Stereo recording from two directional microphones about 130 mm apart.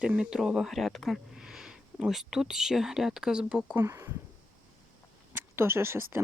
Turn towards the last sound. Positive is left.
turn(degrees=-20)  # may be behind; listen again after turning